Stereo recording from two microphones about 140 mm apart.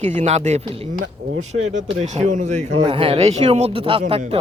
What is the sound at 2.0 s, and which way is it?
Speech, 55° right (ahead or behind).